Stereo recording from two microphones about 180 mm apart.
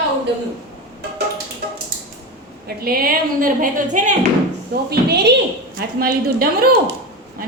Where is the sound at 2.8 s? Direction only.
55° right (ahead or behind).